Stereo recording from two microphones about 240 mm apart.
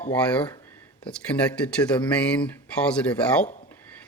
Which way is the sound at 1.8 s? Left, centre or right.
Centre.